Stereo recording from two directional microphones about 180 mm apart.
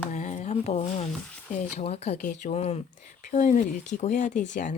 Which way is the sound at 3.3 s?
45° left (ahead or behind).